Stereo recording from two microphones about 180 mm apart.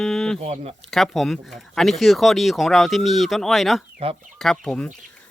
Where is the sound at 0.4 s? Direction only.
35° right (ahead or behind).